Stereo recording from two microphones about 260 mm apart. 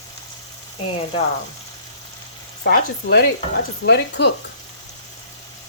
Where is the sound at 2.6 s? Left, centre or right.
Left.